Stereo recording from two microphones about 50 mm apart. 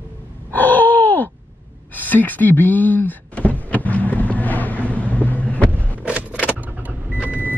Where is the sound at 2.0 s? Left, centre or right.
Left.